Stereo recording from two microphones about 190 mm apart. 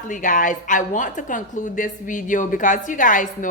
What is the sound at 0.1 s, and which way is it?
A woman's voice, 45° left (ahead or behind).